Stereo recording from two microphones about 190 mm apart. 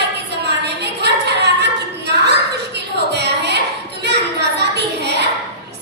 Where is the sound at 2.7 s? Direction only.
60° right (ahead or behind).